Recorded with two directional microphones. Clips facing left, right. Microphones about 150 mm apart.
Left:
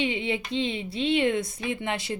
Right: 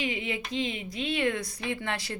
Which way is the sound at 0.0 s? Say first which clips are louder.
Left 4 dB; 25° left (ahead or behind).